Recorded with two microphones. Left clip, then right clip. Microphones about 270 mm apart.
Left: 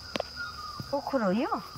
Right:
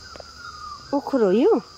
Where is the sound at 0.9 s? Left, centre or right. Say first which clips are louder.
Right 9 dB; centre.